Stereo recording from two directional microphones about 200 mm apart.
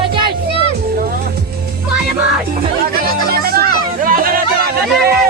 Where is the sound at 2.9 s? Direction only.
50° right (ahead or behind).